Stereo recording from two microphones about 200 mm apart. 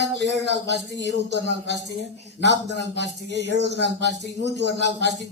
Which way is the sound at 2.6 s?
60° left (ahead or behind).